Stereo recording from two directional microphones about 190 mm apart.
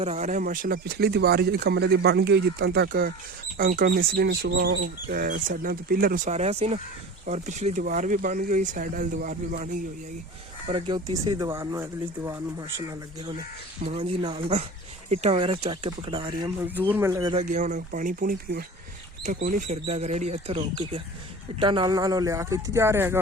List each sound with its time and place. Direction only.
0.0 s speech: 35° right (ahead or behind)
10.7 s speech: 25° right (ahead or behind)
16.6 s speech: 10° right (ahead or behind)
17.4 s speech: 40° right (ahead or behind); by 23.1 s 10° right (ahead or behind)